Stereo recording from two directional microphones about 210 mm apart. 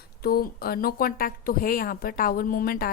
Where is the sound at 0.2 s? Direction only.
45° left (ahead or behind).